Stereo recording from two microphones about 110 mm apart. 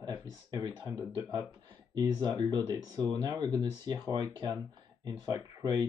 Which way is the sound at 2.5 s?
35° right (ahead or behind).